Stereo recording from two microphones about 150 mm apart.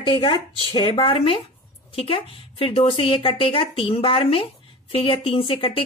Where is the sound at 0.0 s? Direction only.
40° left (ahead or behind).